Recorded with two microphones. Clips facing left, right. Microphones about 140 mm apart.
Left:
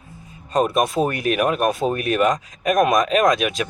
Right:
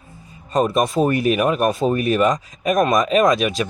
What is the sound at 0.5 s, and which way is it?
Speech, centre (ahead or behind).